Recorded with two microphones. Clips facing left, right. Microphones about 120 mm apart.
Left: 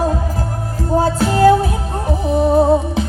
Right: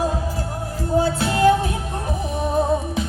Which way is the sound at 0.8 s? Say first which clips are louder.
Left 4 dB; 40° left (ahead or behind).